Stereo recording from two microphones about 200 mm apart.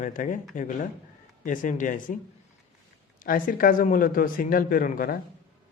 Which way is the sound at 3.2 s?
45° left (ahead or behind).